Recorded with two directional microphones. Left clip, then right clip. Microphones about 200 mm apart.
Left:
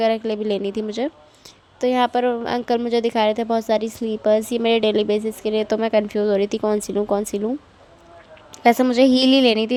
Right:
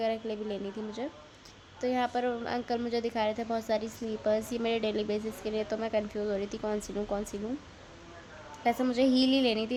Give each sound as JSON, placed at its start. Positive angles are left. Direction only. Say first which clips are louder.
{"t": 0.0, "sound": "a woman's voice", "louder": "left 12 dB", "side_deg": 45}
{"t": 8.5, "sound": "a woman's voice", "louder": "left 13 dB", "side_deg": 50}